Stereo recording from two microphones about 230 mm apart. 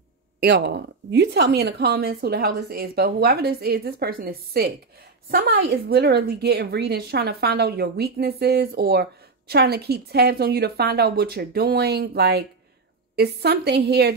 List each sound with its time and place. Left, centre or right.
0.4 s a woman's voice: right